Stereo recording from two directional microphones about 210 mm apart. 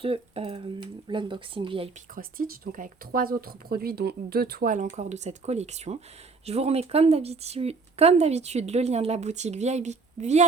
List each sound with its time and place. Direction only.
0.0 s speech: 25° right (ahead or behind)
2.1 s speech: 40° right (ahead or behind)